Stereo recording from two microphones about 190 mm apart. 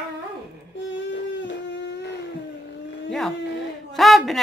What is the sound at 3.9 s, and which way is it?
Speech, centre (ahead or behind).